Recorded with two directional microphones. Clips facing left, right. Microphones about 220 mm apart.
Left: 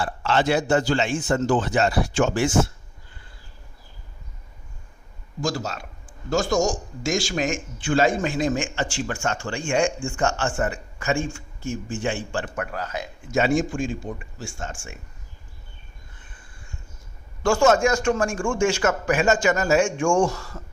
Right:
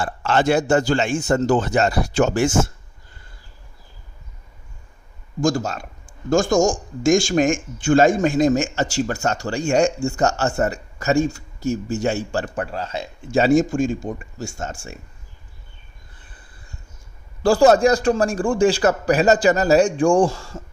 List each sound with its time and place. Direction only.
0.0 s a man's voice: 45° right (ahead or behind)
5.4 s a man's voice: 50° right (ahead or behind)
12.5 s a man's voice: 30° right (ahead or behind)
16.2 s a sound: 35° right (ahead or behind)
17.4 s a man's voice: 35° right (ahead or behind)